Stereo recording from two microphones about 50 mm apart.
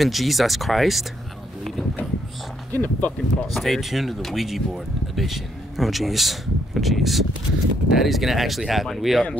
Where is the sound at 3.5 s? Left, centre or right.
Centre.